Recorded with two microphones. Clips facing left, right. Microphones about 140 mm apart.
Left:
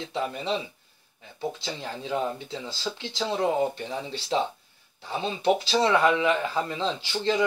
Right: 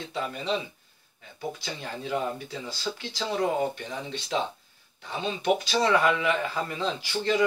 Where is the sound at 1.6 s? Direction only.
25° left (ahead or behind).